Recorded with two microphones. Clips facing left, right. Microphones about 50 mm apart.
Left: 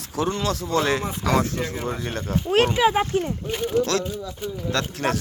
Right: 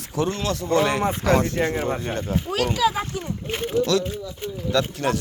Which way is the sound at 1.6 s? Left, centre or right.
Right.